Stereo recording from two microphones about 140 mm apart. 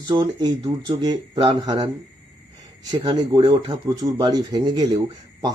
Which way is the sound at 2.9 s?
30° right (ahead or behind).